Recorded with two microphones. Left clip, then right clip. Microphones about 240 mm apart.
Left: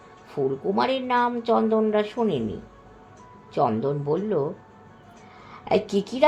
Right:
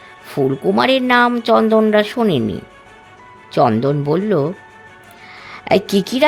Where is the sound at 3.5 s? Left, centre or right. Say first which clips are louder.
Right 9 dB; right.